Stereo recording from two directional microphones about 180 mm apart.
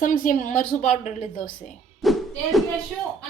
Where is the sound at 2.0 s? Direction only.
Centre (ahead or behind).